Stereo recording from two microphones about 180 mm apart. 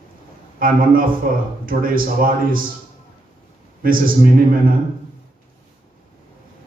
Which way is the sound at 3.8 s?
50° right (ahead or behind).